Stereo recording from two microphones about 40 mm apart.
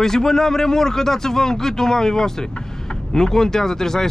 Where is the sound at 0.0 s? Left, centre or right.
Centre.